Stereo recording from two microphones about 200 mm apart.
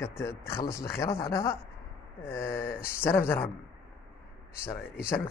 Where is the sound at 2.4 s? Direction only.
45° left (ahead or behind).